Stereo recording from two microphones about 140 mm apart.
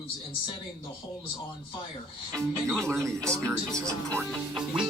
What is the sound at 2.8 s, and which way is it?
Speech, 20° right (ahead or behind).